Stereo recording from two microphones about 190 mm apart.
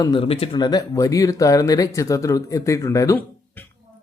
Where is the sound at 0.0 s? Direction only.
25° left (ahead or behind).